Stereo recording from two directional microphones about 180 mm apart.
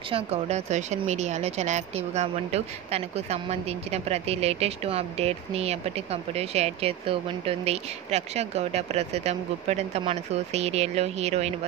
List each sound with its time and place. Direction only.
0.1 s speech: 35° right (ahead or behind)